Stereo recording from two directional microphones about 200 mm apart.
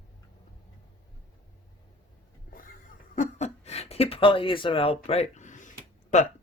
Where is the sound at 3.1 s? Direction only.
35° left (ahead or behind).